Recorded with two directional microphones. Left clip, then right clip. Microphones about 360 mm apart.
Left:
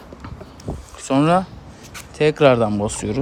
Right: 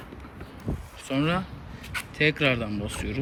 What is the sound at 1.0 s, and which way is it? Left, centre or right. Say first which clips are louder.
Speech: left 11 dB; centre.